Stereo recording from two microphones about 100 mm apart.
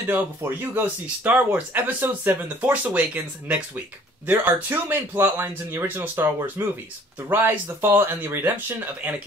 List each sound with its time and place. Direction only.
0.0 s speech: 20° right (ahead or behind)